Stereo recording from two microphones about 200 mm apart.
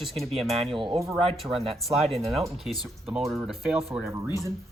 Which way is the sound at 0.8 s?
25° right (ahead or behind).